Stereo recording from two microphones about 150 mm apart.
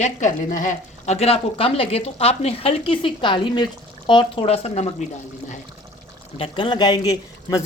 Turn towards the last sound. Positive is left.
turn(degrees=25)  # may be behind; listen again after turning